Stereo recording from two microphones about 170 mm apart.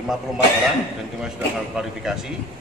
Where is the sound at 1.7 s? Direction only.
5° right (ahead or behind).